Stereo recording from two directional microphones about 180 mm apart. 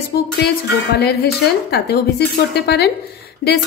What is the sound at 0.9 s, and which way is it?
Speech, 65° left (ahead or behind).